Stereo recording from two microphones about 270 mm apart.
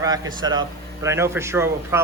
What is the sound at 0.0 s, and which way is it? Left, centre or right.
A man's voice, centre.